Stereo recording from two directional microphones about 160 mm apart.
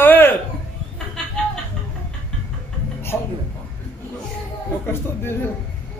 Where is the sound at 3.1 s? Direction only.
10° left (ahead or behind).